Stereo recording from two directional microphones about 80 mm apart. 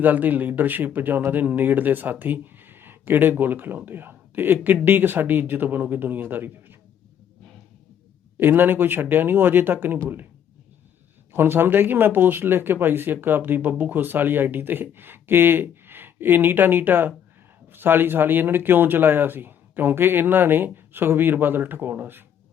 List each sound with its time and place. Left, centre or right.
0.0 s speech: right
8.4 s speech: right
11.3 s speech: right